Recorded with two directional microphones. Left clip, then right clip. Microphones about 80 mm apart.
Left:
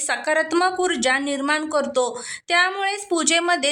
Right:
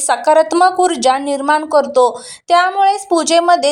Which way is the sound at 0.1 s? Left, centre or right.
Right.